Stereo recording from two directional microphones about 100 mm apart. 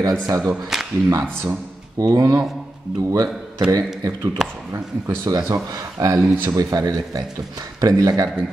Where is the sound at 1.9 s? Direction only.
35° right (ahead or behind).